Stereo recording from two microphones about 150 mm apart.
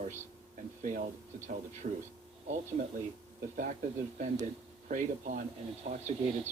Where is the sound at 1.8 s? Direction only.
45° right (ahead or behind).